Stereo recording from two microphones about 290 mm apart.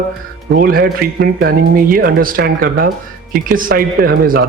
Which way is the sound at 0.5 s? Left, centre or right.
Right.